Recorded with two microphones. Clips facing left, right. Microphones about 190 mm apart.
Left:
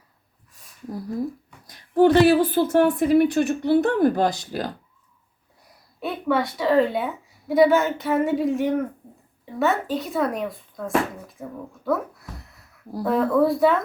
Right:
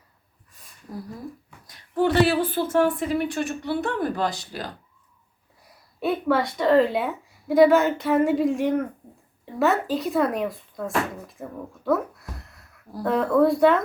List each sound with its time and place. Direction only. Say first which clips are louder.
0.5 s a sound: even; centre (ahead or behind)
1.6 s speech: left 6 dB; 40° left (ahead or behind)
6.0 s a woman's voice: right 1 dB; centre (ahead or behind)